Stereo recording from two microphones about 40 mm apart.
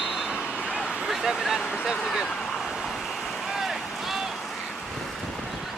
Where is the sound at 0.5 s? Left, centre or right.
Right.